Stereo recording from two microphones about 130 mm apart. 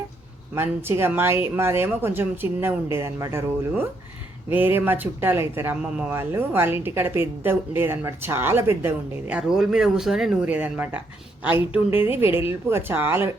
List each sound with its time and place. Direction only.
0.5 s speech: 20° right (ahead or behind)